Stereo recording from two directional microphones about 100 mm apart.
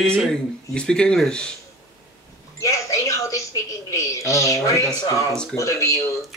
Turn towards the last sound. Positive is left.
turn(degrees=30)  # may be behind; listen again after turning